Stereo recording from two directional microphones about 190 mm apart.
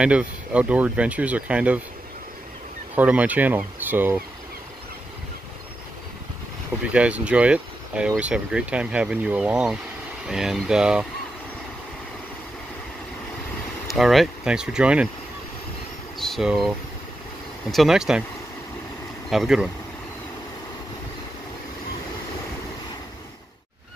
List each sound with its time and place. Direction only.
0.0 s speech: 5° right (ahead or behind)
3.0 s speech: 10° right (ahead or behind)
6.9 s speech: 5° right (ahead or behind)
13.8 s speech: centre (ahead or behind)
16.2 s speech: centre (ahead or behind)
19.3 s speech: centre (ahead or behind)